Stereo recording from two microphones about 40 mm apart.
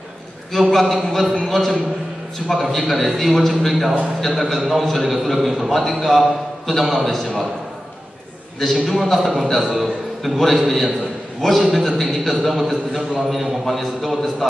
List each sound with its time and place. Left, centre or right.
0.5 s a man's voice: centre
8.8 s a man's voice: centre